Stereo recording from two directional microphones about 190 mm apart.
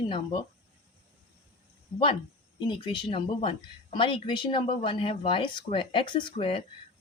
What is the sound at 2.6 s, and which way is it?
Speech, 25° left (ahead or behind).